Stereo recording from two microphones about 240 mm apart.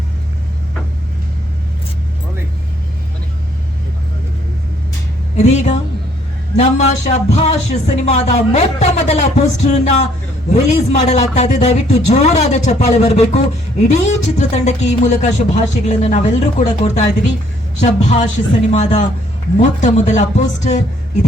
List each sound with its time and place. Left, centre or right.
5.4 s a man's voice: left